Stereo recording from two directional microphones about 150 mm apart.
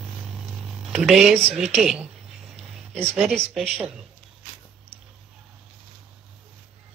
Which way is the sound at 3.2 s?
Centre (ahead or behind).